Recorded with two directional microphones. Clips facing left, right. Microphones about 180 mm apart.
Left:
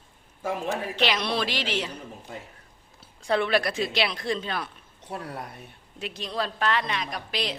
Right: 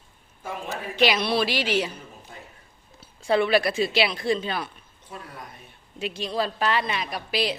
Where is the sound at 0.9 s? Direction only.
10° right (ahead or behind).